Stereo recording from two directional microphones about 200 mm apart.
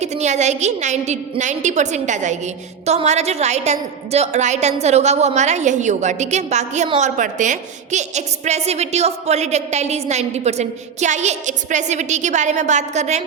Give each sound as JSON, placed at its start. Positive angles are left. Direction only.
{"t": 0.0, "sound": "a woman's voice", "side_deg": -35}